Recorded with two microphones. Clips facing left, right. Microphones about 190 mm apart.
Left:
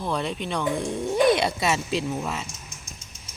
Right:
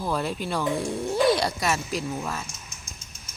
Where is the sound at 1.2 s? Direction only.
20° left (ahead or behind).